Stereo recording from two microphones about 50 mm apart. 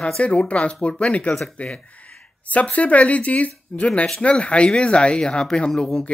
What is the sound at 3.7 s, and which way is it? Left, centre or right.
Speech, centre.